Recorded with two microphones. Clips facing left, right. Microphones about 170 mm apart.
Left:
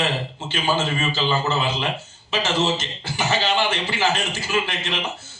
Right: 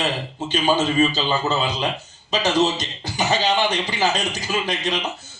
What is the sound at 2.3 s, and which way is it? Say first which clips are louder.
A man's voice: right 3 dB; 15° right (ahead or behind).